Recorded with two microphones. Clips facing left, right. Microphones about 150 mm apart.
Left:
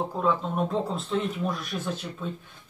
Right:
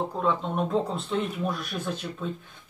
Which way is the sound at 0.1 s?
5° left (ahead or behind).